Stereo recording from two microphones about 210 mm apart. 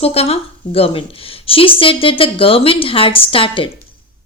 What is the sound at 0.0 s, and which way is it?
Speech, 30° left (ahead or behind).